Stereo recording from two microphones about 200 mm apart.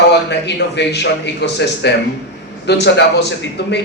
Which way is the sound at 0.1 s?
60° left (ahead or behind).